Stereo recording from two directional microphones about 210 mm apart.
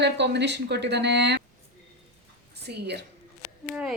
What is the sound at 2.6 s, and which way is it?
Speech, 55° right (ahead or behind).